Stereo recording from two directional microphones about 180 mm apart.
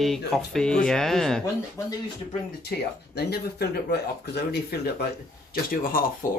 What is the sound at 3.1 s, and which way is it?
Speech, 65° left (ahead or behind).